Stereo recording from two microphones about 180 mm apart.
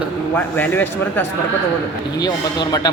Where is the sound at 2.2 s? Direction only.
20° left (ahead or behind).